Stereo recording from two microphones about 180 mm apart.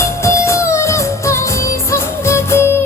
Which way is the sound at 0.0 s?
15° left (ahead or behind).